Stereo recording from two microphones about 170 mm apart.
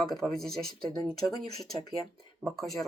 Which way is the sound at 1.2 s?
20° left (ahead or behind).